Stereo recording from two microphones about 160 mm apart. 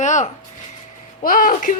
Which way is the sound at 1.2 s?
60° left (ahead or behind).